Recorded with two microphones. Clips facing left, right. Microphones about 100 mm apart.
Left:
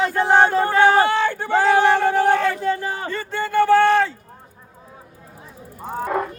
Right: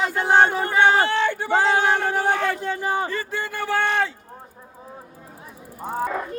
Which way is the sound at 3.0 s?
5° right (ahead or behind).